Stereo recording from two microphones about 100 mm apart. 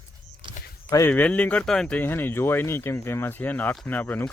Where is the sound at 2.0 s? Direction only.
20° left (ahead or behind).